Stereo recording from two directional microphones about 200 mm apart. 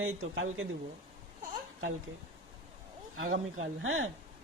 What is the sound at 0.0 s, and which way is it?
Speech, 80° right.